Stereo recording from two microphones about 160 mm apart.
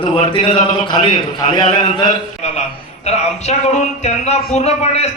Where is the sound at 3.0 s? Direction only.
45° left (ahead or behind).